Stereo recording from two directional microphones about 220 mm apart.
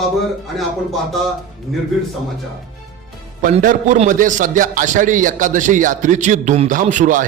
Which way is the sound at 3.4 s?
35° right (ahead or behind).